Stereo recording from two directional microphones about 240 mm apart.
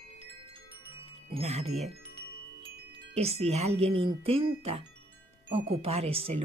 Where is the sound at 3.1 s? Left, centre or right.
Right.